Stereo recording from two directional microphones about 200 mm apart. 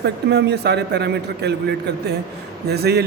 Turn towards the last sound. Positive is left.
turn(degrees=-55)  # may be behind; listen again after turning